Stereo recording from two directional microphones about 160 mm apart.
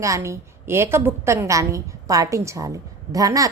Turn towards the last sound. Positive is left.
turn(degrees=-20)  # may be behind; listen again after turning